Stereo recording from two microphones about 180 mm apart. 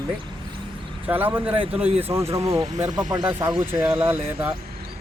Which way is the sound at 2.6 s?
40° right (ahead or behind).